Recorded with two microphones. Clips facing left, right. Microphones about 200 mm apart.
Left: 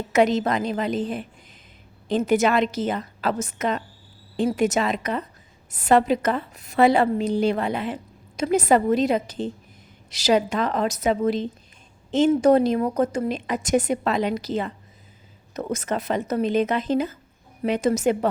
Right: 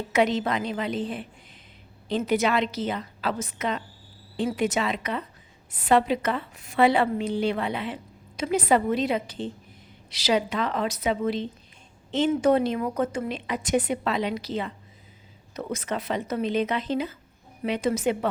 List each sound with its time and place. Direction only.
0.1 s a woman's voice: 45° left (ahead or behind)